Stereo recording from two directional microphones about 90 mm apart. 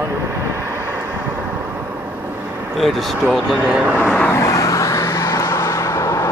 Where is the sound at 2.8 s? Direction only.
5° right (ahead or behind).